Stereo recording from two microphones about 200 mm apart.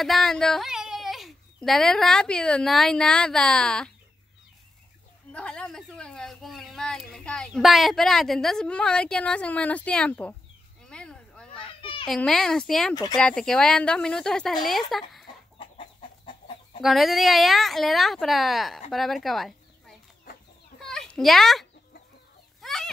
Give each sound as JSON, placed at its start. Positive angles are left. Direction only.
{"t": 0.0, "sound": "speech", "side_deg": 0}
{"t": 5.3, "sound": "speech", "side_deg": 5}
{"t": 10.9, "sound": "a sound", "side_deg": 5}
{"t": 11.8, "sound": "children playing", "side_deg": 25}
{"t": 12.1, "sound": "speech", "side_deg": 0}
{"t": 16.3, "sound": "chicken", "side_deg": 25}
{"t": 16.8, "sound": "speech", "side_deg": 0}
{"t": 20.8, "sound": "a sound", "side_deg": 0}